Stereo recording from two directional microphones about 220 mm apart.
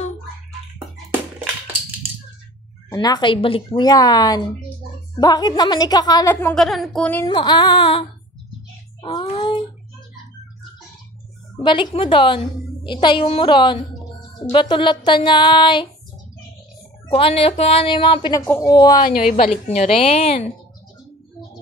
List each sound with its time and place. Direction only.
2.9 s a woman's voice: 20° left (ahead or behind)
7.2 s music: 20° left (ahead or behind)
9.0 s child singing: 25° left (ahead or behind)
11.6 s music: 20° left (ahead or behind)
17.1 s music: 25° left (ahead or behind)
18.4 s a woman's voice: 10° left (ahead or behind)
18.7 s music: 20° left (ahead or behind)
18.9 s a woman's voice: 40° left (ahead or behind)
19.4 s music: 30° left (ahead or behind)